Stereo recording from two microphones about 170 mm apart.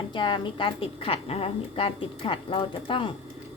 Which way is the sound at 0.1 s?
30° left (ahead or behind).